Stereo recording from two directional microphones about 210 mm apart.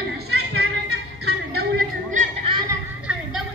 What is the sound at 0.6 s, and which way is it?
Music, 50° right (ahead or behind).